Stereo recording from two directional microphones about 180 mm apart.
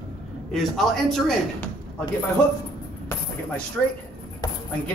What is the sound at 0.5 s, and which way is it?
Speech, centre (ahead or behind).